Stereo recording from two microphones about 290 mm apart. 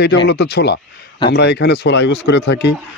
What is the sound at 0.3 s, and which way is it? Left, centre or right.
A man's voice, left.